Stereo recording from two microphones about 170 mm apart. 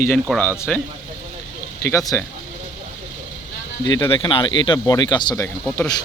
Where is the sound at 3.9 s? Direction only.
20° left (ahead or behind).